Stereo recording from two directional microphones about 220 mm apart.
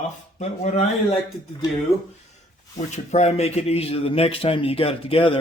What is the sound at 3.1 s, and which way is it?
A man's voice, 30° left (ahead or behind).